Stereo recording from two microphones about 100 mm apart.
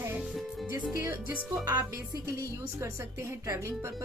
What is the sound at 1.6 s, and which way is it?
Speech, 40° right (ahead or behind).